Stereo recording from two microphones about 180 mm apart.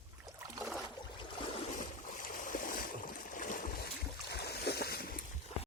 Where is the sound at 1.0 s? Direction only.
25° left (ahead or behind).